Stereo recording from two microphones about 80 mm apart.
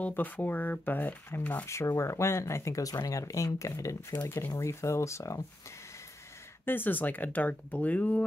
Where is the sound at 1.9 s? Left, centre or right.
Left.